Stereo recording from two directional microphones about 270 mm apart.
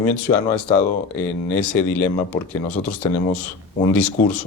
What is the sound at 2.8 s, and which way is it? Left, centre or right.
Speech, centre.